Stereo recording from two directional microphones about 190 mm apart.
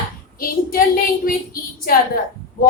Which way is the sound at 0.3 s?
50° left (ahead or behind).